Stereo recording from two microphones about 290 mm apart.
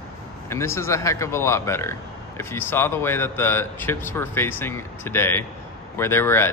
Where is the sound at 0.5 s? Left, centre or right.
Centre.